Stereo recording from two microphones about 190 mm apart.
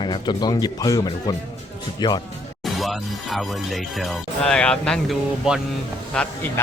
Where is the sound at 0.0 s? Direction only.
25° left (ahead or behind).